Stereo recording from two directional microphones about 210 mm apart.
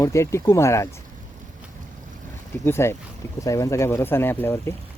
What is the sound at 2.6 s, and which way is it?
Speech, 10° left (ahead or behind).